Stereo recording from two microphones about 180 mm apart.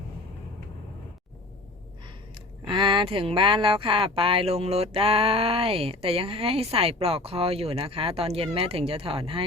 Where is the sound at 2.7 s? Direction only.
25° right (ahead or behind).